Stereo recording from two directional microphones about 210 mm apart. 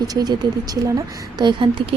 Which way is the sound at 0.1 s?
20° right (ahead or behind).